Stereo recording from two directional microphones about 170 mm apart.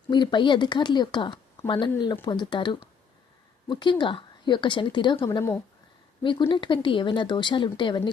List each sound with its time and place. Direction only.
0.1 s speech: 25° left (ahead or behind)
5.4 s speech: 15° left (ahead or behind)
6.5 s speech: 30° left (ahead or behind)